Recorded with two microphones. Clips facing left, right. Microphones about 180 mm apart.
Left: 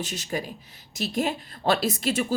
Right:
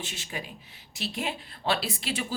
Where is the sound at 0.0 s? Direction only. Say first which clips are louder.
Left 7 dB; 40° left (ahead or behind).